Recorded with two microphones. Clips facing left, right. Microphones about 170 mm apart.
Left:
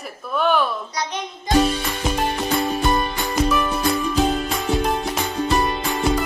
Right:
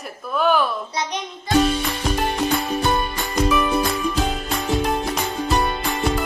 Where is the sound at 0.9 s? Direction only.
20° right (ahead or behind).